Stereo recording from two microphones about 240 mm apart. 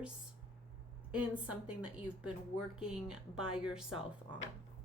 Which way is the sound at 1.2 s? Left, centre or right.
Centre.